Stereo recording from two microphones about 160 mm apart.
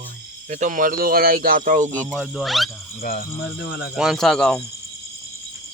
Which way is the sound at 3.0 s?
75° left (ahead or behind).